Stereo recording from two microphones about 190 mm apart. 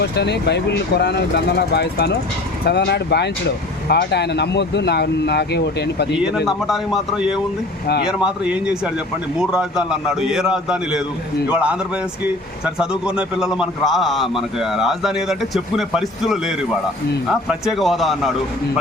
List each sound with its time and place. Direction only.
0.0 s speech: 60° left (ahead or behind)
6.1 s a man's voice: centre (ahead or behind)